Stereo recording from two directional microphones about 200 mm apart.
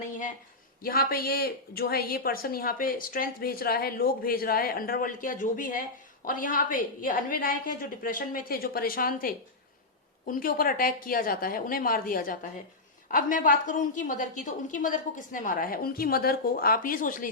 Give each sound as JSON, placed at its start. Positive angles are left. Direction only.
{"t": 0.8, "sound": "speech", "side_deg": 50}